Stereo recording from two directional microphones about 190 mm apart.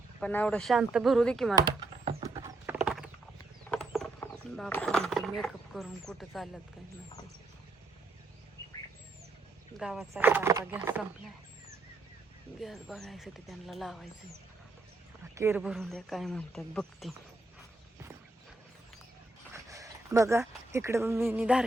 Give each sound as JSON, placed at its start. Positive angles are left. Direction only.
{"t": 0.2, "sound": "speech", "side_deg": 10}
{"t": 2.2, "sound": "clip-clop", "side_deg": -15}
{"t": 3.7, "sound": "a sound", "side_deg": 5}
{"t": 9.7, "sound": "speech", "side_deg": 0}
{"t": 12.5, "sound": "speech", "side_deg": 0}
{"t": 15.4, "sound": "speech", "side_deg": -10}
{"t": 19.6, "sound": "a sound", "side_deg": -15}
{"t": 20.7, "sound": "speech", "side_deg": -15}